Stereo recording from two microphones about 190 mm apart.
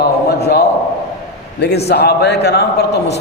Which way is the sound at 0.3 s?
60° left (ahead or behind).